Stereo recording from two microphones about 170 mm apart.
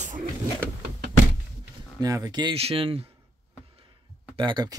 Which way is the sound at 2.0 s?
20° right (ahead or behind).